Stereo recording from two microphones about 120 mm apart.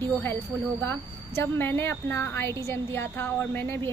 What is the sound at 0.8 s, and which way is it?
A woman's voice, 20° left (ahead or behind).